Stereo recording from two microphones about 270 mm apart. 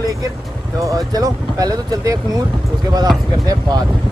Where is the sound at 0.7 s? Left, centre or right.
Centre.